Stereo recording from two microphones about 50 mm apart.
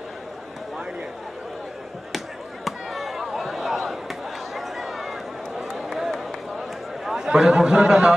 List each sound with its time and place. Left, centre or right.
2.1 s chop: centre
4.6 s a sound: centre
5.8 s run: centre
7.2 s speech: centre